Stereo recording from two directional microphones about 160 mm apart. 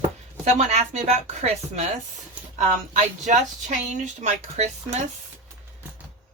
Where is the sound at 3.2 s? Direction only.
45° right (ahead or behind).